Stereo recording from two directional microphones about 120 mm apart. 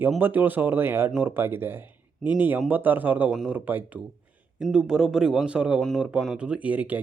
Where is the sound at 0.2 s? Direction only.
15° right (ahead or behind).